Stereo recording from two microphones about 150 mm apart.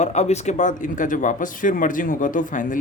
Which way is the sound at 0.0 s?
50° left (ahead or behind).